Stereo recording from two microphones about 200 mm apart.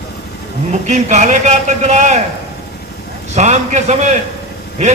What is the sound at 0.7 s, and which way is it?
A man's voice, 35° right (ahead or behind).